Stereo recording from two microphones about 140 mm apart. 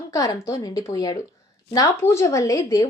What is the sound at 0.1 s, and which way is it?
A woman's voice, 25° left (ahead or behind).